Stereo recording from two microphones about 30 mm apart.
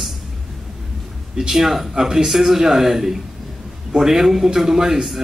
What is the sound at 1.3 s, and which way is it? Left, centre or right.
Speech, right.